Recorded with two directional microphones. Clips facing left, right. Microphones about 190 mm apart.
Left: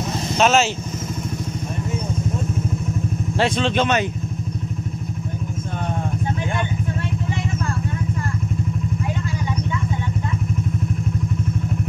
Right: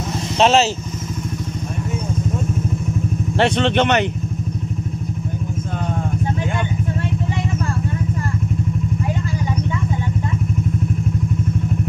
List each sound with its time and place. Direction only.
0.4 s speech: 30° right (ahead or behind)
3.3 s speech: 65° right (ahead or behind)